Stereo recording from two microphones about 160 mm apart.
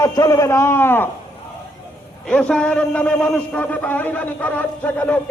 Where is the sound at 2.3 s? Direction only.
5° left (ahead or behind).